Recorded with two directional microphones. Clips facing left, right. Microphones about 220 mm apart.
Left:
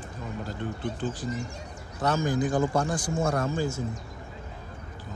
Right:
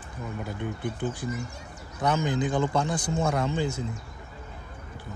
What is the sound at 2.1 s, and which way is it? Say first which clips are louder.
Speech: left 2 dB; 20° right (ahead or behind).